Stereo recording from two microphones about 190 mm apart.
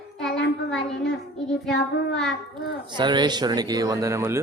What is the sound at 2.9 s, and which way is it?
Speech, 25° right (ahead or behind).